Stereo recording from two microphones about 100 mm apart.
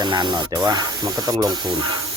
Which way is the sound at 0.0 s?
50° right (ahead or behind).